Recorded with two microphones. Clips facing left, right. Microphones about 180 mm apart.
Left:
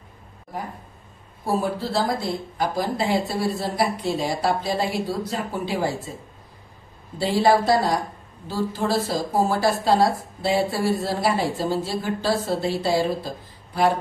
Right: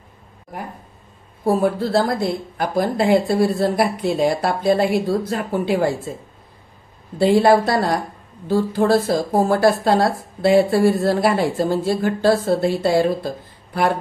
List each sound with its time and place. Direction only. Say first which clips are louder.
1.4 s speech: right 6 dB; 55° right (ahead or behind)
7.2 s speech: right 5 dB; 55° right (ahead or behind)